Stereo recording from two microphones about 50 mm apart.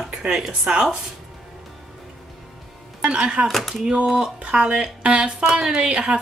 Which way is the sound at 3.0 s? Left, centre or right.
Centre.